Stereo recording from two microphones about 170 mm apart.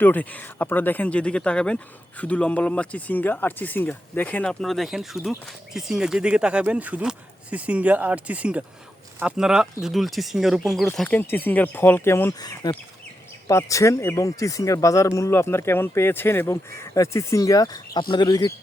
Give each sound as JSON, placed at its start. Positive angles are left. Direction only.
{"t": 0.0, "sound": "speech", "side_deg": 10}